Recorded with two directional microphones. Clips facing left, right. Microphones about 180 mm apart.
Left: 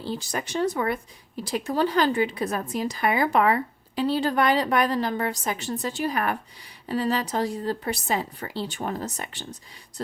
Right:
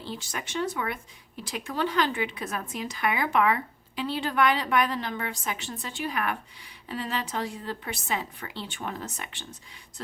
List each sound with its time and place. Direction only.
0.0 s a woman's voice: 40° left (ahead or behind)